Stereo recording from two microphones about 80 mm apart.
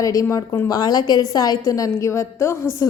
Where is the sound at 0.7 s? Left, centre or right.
Left.